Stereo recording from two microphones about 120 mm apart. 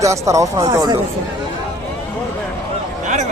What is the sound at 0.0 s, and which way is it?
Speech, 25° right (ahead or behind).